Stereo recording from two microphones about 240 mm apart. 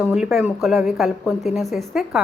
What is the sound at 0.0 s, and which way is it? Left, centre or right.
Speech, centre.